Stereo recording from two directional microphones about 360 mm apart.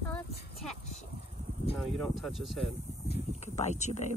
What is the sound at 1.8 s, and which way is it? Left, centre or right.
Speech, centre.